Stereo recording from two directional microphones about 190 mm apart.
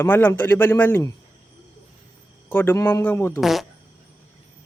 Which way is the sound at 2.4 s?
10° left (ahead or behind).